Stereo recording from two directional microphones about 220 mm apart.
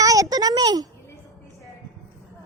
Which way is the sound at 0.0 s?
15° right (ahead or behind).